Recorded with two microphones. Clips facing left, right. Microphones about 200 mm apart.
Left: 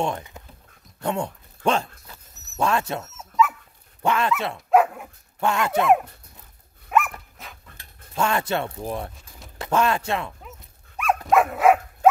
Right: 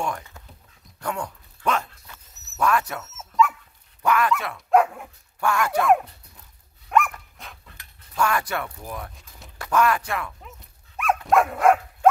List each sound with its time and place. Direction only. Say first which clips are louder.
0.0 s speech: left 3 dB; 20° left (ahead or behind)
1.0 s a sound: left 4 dB; 25° left (ahead or behind)
3.1 s dog: right 1 dB; centre (ahead or behind)
4.0 s dog: right 1 dB; 25° left (ahead or behind)
4.4 s speech: left 4 dB; 25° left (ahead or behind)
4.6 s dog: even; centre (ahead or behind)
5.4 s speech: left 1 dB; 20° left (ahead or behind)
6.9 s dog: right 1 dB; 5° left (ahead or behind)
8.1 s speech: left 1 dB; 25° left (ahead or behind)
10.4 s dog: left 2 dB; centre (ahead or behind)